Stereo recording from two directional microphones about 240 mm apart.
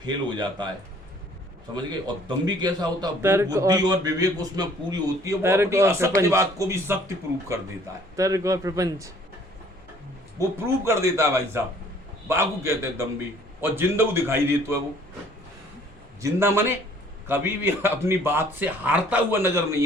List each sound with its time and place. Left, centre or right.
0.0 s a man's voice: centre
1.7 s a man's voice: centre
8.1 s a man's voice: centre
10.8 s a man's voice: centre
16.2 s a man's voice: centre